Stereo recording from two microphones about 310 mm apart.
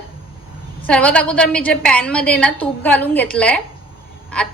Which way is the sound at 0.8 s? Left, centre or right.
Centre.